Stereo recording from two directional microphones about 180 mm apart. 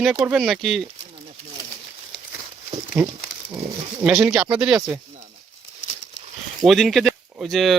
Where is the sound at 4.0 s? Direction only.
5° right (ahead or behind).